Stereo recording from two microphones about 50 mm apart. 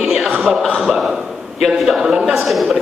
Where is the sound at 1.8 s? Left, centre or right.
Centre.